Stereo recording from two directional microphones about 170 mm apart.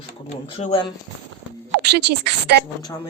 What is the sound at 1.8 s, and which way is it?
Speech, 80° right.